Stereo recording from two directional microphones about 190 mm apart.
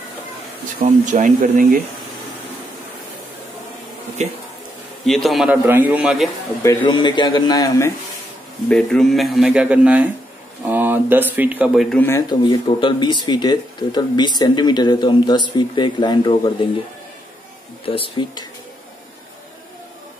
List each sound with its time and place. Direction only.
0.8 s speech: 40° right (ahead or behind)
5.0 s a man's voice: centre (ahead or behind)
6.6 s speech: 20° left (ahead or behind)
8.6 s a man's voice: 5° left (ahead or behind)
12.3 s speech: 25° left (ahead or behind)
17.8 s speech: 30° left (ahead or behind)